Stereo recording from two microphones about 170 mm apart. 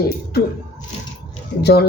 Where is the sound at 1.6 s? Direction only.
75° left (ahead or behind).